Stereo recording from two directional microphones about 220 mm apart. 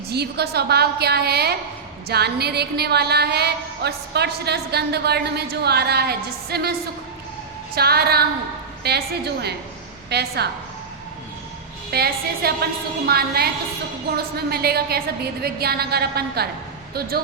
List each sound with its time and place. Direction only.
0.1 s a woman's voice: 45° right (ahead or behind)
7.8 s a woman's voice: 45° right (ahead or behind)
11.9 s a woman's voice: 45° right (ahead or behind)